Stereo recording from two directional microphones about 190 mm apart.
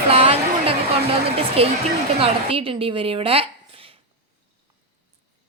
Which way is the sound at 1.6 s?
30° right (ahead or behind).